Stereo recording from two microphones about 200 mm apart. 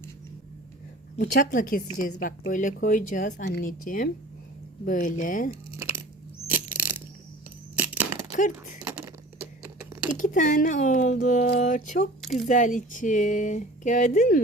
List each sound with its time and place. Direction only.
1.2 s a woman's voice: 45° left (ahead or behind)
6.5 s crushing: 10° right (ahead or behind)
7.8 s a sound: 10° right (ahead or behind)
8.4 s speech: 40° left (ahead or behind)
10.2 s speech: 40° left (ahead or behind)